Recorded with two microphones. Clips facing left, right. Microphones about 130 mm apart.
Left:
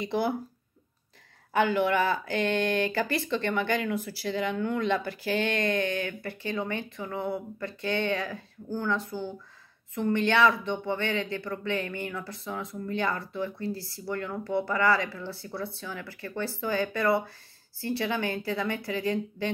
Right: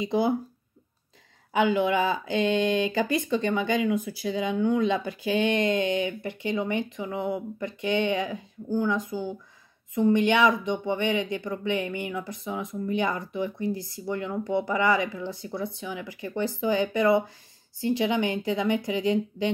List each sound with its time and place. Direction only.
0.0 s speech: 20° right (ahead or behind)
1.5 s speech: 15° right (ahead or behind)